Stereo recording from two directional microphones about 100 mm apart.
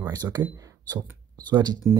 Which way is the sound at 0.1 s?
40° right (ahead or behind).